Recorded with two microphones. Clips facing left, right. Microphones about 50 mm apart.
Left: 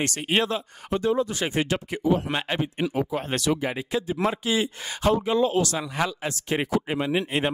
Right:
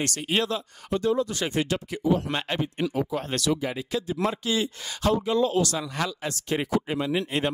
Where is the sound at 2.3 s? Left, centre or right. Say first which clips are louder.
Left 1 dB; centre.